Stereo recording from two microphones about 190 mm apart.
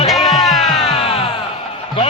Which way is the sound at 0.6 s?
35° left (ahead or behind).